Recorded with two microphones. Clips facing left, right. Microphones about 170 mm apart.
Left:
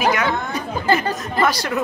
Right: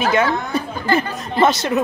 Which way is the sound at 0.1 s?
30° right (ahead or behind).